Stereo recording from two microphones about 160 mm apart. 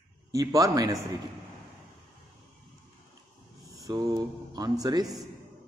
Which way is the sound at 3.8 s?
25° right (ahead or behind).